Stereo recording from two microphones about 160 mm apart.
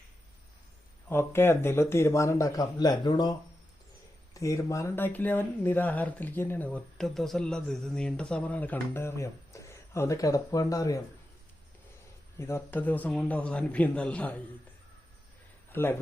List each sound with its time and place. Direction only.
1.0 s speech: 15° left (ahead or behind)
4.4 s speech: 20° left (ahead or behind)
12.4 s speech: 15° left (ahead or behind)
15.7 s speech: 15° left (ahead or behind)